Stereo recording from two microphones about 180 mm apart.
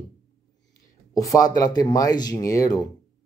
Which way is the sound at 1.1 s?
20° left (ahead or behind).